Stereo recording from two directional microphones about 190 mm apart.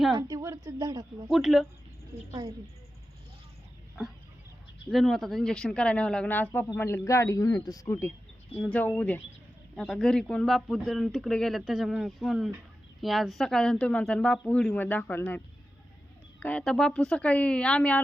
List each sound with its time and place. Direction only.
0.2 s speech: 20° right (ahead or behind)
1.3 s speech: centre (ahead or behind)
4.9 s speech: centre (ahead or behind)
16.4 s speech: 5° left (ahead or behind)